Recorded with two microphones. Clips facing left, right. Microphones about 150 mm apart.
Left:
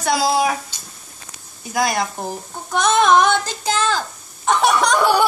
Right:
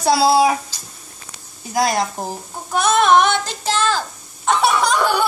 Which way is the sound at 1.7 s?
35° right (ahead or behind).